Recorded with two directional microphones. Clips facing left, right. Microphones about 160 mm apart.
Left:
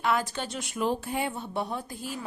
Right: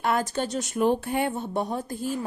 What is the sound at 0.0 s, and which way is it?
Speech, 50° right (ahead or behind).